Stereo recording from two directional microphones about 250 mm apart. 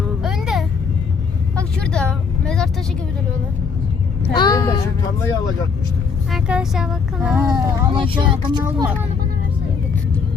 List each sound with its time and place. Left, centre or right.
0.2 s a sound: centre
1.5 s vehicle: centre
4.4 s speech: centre
6.3 s speech: centre